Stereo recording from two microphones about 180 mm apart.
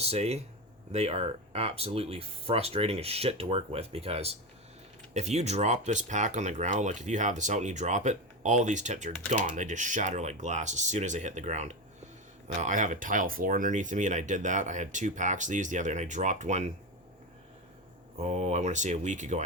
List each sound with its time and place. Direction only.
0.0 s speech: 35° right (ahead or behind)
18.3 s speech: 40° right (ahead or behind)